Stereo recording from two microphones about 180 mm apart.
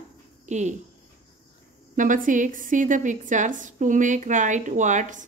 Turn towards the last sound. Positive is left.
turn(degrees=-45)  # may be behind; listen again after turning